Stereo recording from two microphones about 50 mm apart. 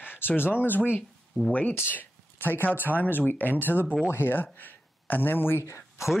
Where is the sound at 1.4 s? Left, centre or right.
Right.